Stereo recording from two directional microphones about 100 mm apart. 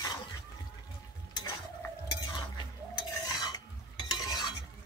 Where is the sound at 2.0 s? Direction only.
45° left (ahead or behind).